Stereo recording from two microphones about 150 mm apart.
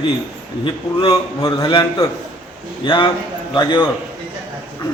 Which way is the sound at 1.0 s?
30° left (ahead or behind).